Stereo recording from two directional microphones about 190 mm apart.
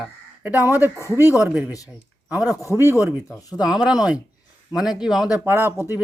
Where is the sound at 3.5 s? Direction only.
5° right (ahead or behind).